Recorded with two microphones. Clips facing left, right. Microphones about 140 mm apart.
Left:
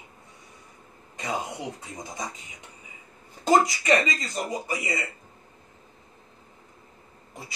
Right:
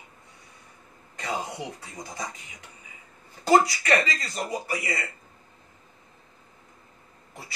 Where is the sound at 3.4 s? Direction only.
20° left (ahead or behind).